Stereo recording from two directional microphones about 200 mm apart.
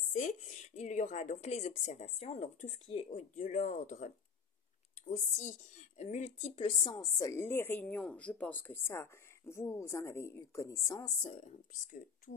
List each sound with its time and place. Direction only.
0.1 s a woman's voice: 40° left (ahead or behind); by 11.1 s 15° left (ahead or behind)
11.1 s speech: 30° left (ahead or behind)